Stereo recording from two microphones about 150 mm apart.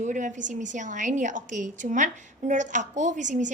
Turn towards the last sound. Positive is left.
turn(degrees=-55)  # may be behind; listen again after turning